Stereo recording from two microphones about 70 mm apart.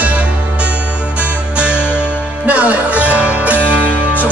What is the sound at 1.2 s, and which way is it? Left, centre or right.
Music, centre.